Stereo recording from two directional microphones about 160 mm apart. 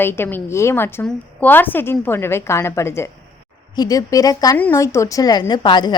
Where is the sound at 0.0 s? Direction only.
15° left (ahead or behind).